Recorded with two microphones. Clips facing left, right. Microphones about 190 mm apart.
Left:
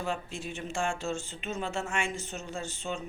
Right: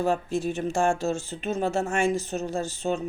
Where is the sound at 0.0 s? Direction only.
40° right (ahead or behind).